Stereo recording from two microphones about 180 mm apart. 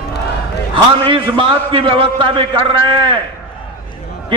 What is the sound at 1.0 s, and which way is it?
A man's voice, 25° right (ahead or behind).